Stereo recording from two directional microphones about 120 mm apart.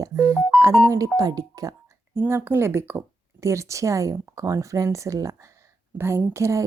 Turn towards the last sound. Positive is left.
turn(degrees=-25)  # may be behind; listen again after turning